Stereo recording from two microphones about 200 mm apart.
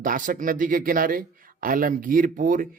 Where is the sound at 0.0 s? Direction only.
40° right (ahead or behind).